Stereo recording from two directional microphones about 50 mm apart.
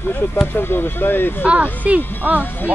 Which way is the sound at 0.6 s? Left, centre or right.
Left.